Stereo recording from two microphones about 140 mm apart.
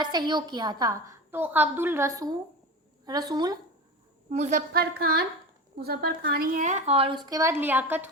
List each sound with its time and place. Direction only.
0.0 s a woman's voice: 30° right (ahead or behind)
1.3 s a woman's voice: 15° right (ahead or behind); by 3.6 s 30° right (ahead or behind)
4.3 s speech: 55° right (ahead or behind); by 4.9 s 75° right (ahead or behind)
5.7 s speech: 90° right; by 7.5 s 25° right (ahead or behind)
7.5 s a woman's voice: 15° right (ahead or behind)